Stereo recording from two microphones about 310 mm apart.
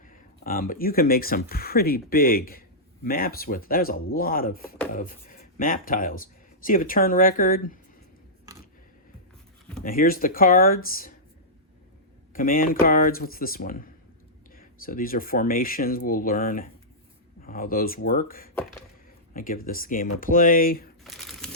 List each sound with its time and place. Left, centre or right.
0.0 s speech: left
9.8 s speech: left
12.3 s speech: left
21.0 s crumpling: centre